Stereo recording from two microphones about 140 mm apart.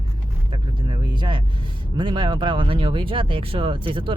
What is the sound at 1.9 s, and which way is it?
Speech, 35° right (ahead or behind).